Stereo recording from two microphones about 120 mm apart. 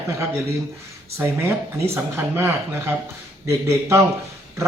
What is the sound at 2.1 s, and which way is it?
Speech, 20° right (ahead or behind).